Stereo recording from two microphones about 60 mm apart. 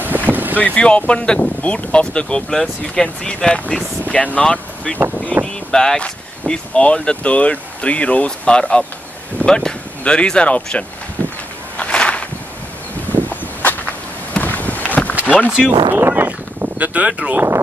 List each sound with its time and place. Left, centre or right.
0.0 s boat: right
0.6 s speech: left
11.7 s walk: left
13.3 s a sound: left
16.1 s a sound: right
17.1 s speech: centre